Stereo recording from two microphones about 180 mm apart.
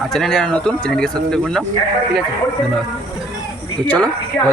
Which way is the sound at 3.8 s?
5° left (ahead or behind).